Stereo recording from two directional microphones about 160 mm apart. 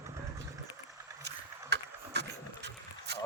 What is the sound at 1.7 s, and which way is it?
Vehicle, 90° right.